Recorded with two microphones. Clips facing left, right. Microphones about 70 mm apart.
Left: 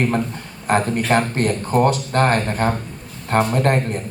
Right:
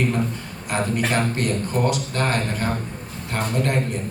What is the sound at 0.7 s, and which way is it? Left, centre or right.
A man's voice, left.